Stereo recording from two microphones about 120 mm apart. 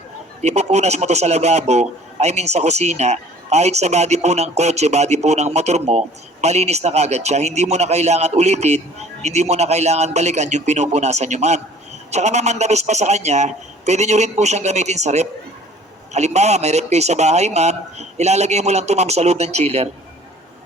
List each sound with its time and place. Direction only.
0.4 s a man's voice: 70° right (ahead or behind)